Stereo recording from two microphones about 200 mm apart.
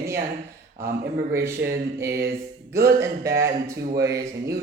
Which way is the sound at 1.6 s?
60° right (ahead or behind).